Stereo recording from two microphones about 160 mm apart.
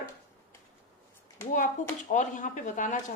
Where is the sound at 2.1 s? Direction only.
50° left (ahead or behind).